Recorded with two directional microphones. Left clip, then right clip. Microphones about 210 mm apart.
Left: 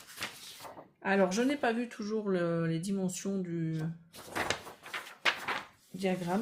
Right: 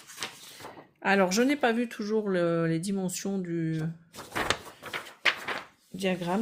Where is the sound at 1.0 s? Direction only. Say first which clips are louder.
Right 5 dB; 45° right (ahead or behind).